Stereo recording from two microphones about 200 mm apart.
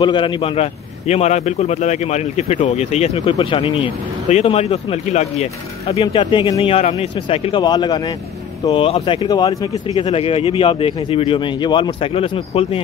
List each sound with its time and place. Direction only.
0.0 s a man's voice: 25° left (ahead or behind)
9.9 s a man's voice: 30° left (ahead or behind)